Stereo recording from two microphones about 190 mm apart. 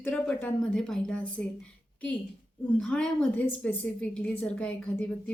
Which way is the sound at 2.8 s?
5° left (ahead or behind).